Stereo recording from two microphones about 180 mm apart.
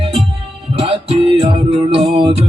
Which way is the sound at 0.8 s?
30° right (ahead or behind).